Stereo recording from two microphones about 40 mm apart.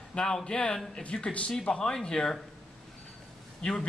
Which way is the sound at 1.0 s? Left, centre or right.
Left.